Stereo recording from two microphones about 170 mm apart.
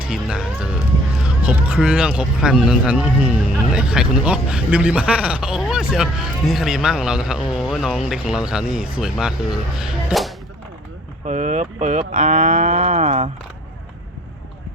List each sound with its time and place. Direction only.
0.0 s speech: 5° right (ahead or behind)
11.3 s cattle: 45° right (ahead or behind)